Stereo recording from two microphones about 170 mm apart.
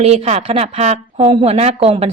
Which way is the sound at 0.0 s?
40° right (ahead or behind).